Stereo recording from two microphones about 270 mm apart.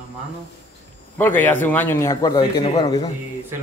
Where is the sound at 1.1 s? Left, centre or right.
Centre.